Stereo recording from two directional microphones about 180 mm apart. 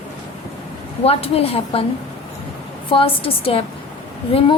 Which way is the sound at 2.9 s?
30° left (ahead or behind).